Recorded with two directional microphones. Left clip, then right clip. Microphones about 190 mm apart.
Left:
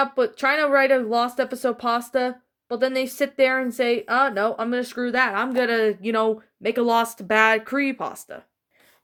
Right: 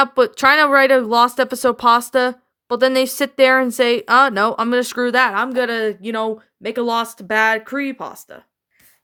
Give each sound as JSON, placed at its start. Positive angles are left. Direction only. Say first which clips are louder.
{"t": 0.0, "sound": "speech", "louder": "right 7 dB", "side_deg": -40}